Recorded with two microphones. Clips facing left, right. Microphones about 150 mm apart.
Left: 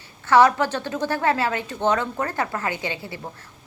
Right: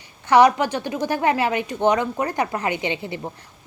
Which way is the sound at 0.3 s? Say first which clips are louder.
Right 1 dB; 15° right (ahead or behind).